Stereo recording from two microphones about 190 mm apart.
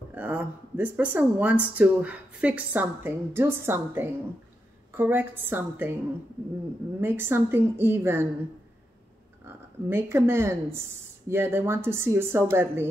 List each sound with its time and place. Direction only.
0.1 s speech: 10° right (ahead or behind)
7.0 s speech: 10° right (ahead or behind)
9.8 s speech: 10° right (ahead or behind)